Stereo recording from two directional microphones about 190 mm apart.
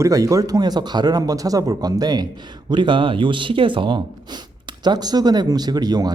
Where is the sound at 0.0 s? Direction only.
15° right (ahead or behind).